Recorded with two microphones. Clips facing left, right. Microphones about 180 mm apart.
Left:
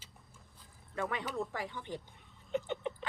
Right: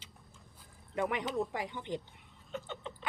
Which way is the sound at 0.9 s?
20° right (ahead or behind).